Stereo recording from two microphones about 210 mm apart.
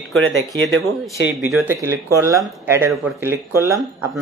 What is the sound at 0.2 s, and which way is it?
Speech, 65° right (ahead or behind).